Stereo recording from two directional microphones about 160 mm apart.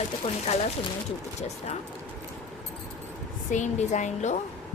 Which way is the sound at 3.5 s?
50° left (ahead or behind).